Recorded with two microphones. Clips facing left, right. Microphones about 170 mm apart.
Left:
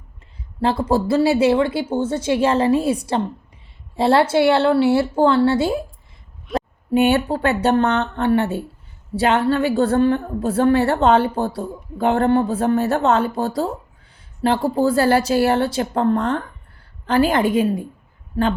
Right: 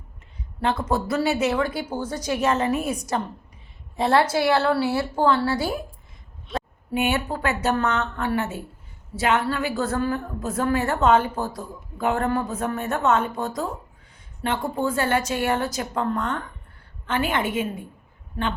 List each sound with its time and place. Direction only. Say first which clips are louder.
0.6 s a woman's voice: left 5 dB; 30° left (ahead or behind)